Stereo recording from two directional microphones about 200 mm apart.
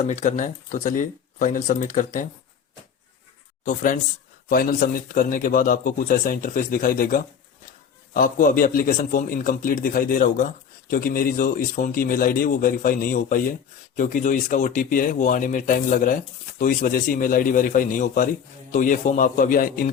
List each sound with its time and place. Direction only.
0.0 s a man's voice: 40° left (ahead or behind)
3.6 s a man's voice: 40° left (ahead or behind)